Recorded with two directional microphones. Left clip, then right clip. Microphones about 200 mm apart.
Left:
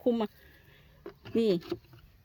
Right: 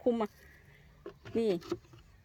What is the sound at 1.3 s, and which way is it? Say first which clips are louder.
Speech: left 4 dB; 40° left (ahead or behind).